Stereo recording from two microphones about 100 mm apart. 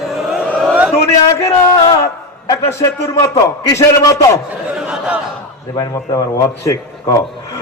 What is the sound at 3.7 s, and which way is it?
Speech, 30° left (ahead or behind).